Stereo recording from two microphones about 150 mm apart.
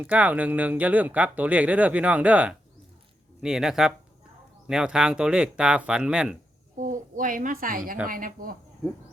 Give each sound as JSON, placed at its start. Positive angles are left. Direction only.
{"t": 0.0, "sound": "speech", "side_deg": -10}
{"t": 6.7, "sound": "a woman's voice", "side_deg": -60}